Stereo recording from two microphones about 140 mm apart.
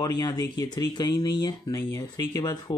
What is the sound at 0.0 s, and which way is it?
Speech, 30° left (ahead or behind).